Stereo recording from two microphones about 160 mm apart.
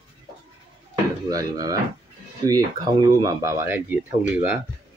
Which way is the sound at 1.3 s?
20° right (ahead or behind).